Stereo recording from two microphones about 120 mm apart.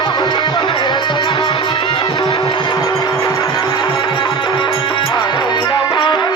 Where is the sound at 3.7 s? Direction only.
40° left (ahead or behind).